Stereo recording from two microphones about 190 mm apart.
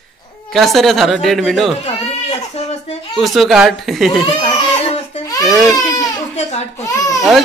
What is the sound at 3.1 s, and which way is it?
A child's voice, centre (ahead or behind).